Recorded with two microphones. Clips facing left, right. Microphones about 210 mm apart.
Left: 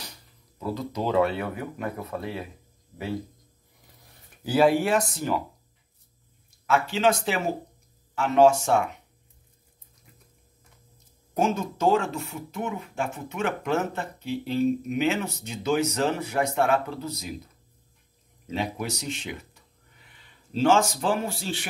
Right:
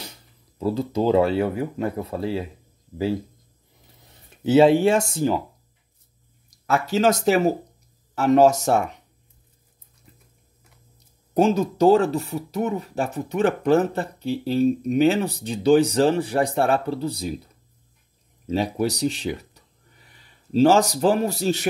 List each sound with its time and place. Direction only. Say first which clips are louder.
0.6 s speech: right 7 dB; 30° right (ahead or behind)
4.0 s speech: right 9 dB; 25° right (ahead or behind)
6.6 s speech: right 3 dB; 40° right (ahead or behind)
11.3 s speech: right 7 dB; 35° right (ahead or behind)
18.5 s a man's voice: right 7 dB; 35° right (ahead or behind)